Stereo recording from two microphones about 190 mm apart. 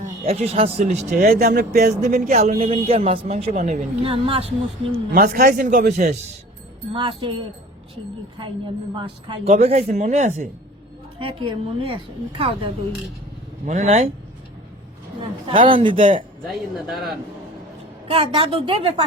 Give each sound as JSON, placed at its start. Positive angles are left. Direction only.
{"t": 0.0, "sound": "speech", "side_deg": -35}
{"t": 2.6, "sound": "speech", "side_deg": -35}
{"t": 4.0, "sound": "a woman's voice", "side_deg": -30}
{"t": 5.1, "sound": "a man's voice", "side_deg": -50}
{"t": 6.9, "sound": "a woman's voice", "side_deg": -25}
{"t": 9.0, "sound": "speech", "side_deg": -25}
{"t": 11.2, "sound": "a woman's voice", "side_deg": -30}
{"t": 15.4, "sound": "a woman's voice", "side_deg": -25}
{"t": 16.5, "sound": "speech", "side_deg": 0}
{"t": 18.1, "sound": "a woman's voice", "side_deg": -30}